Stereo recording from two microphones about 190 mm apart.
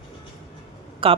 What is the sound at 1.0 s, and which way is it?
Speech, 30° right (ahead or behind).